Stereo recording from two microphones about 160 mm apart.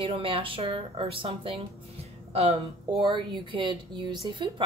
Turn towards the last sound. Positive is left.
turn(degrees=-30)  # may be behind; listen again after turning